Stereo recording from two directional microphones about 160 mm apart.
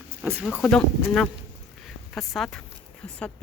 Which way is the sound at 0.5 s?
5° left (ahead or behind).